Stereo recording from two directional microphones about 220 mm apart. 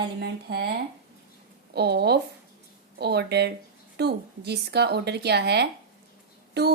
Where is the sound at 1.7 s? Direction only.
50° right (ahead or behind).